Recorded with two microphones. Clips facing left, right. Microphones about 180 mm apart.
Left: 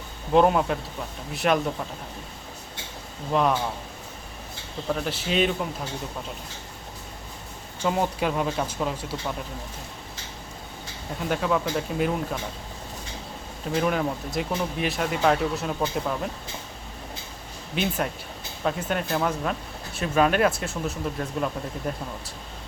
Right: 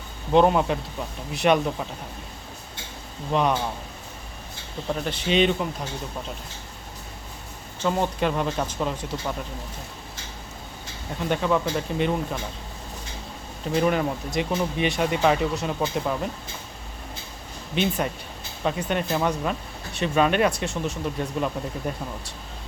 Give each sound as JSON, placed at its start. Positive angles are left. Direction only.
{"t": 0.3, "sound": "speech", "side_deg": 0}
{"t": 3.3, "sound": "speech", "side_deg": 0}
{"t": 4.9, "sound": "speech", "side_deg": 5}
{"t": 7.8, "sound": "speech", "side_deg": 5}
{"t": 11.3, "sound": "speech", "side_deg": 0}
{"t": 13.7, "sound": "speech", "side_deg": 0}
{"t": 17.7, "sound": "speech", "side_deg": 5}